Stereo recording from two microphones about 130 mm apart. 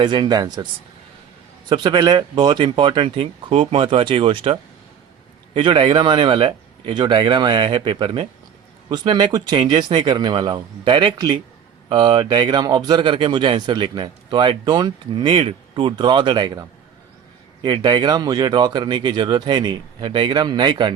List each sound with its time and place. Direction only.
0.0 s speech: 35° right (ahead or behind)
1.7 s speech: 35° right (ahead or behind)